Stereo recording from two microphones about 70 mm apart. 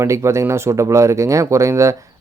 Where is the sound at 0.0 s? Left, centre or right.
Right.